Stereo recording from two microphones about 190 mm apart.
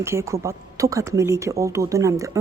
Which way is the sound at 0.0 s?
15° right (ahead or behind).